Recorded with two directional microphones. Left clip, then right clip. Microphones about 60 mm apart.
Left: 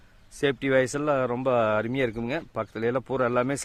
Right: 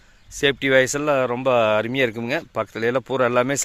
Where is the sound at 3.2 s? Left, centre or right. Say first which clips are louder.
Right 6 dB; right.